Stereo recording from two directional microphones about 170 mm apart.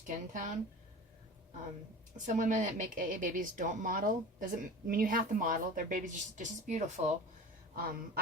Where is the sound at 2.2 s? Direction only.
45° right (ahead or behind).